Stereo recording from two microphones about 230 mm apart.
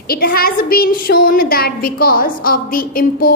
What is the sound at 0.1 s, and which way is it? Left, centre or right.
A woman's voice, left.